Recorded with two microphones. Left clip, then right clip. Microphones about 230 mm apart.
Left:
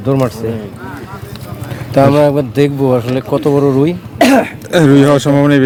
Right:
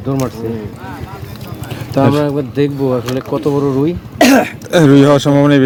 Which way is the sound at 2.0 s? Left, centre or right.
Left.